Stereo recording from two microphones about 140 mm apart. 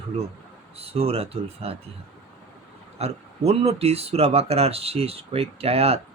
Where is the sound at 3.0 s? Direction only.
45° right (ahead or behind).